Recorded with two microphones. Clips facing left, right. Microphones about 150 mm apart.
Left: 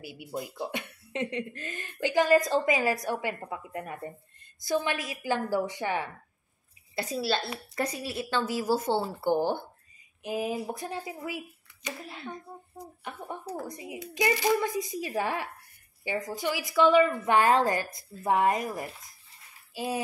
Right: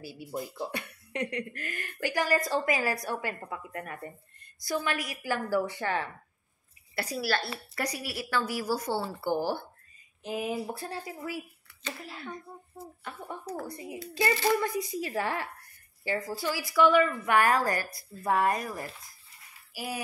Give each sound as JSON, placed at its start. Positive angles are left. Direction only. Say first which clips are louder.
{"t": 0.0, "sound": "a woman's voice", "louder": "even", "side_deg": 15}